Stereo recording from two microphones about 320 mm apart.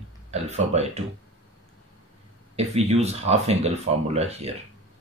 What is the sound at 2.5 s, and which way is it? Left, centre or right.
Speech, centre.